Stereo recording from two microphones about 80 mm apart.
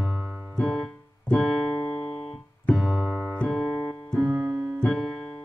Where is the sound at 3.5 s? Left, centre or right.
Centre.